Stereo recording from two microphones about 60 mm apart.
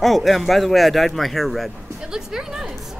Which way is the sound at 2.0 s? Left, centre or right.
Centre.